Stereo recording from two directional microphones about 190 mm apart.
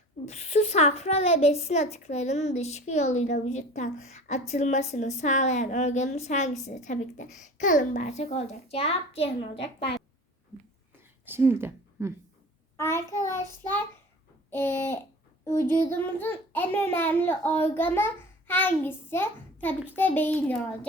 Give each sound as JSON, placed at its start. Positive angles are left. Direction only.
{"t": 0.3, "sound": "a woman's voice", "side_deg": 35}
{"t": 9.6, "sound": "a woman's voice", "side_deg": 60}
{"t": 11.3, "sound": "speech", "side_deg": -10}
{"t": 12.7, "sound": "a child's voice", "side_deg": 15}